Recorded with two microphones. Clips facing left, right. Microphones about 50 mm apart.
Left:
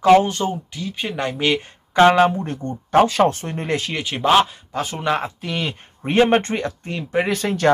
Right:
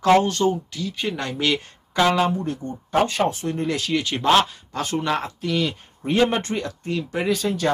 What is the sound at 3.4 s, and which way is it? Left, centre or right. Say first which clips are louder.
Speech: even; left.